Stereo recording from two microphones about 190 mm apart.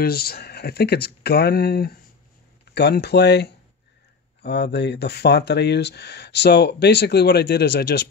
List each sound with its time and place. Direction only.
0.0 s speech: 55° left (ahead or behind)